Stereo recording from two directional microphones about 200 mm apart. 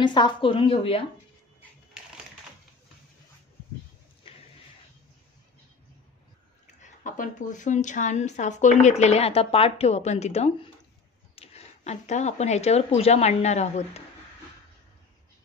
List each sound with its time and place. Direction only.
0.0 s a woman's voice: 20° left (ahead or behind)
4.2 s a sound: 25° left (ahead or behind)
6.8 s a woman's voice: 40° left (ahead or behind)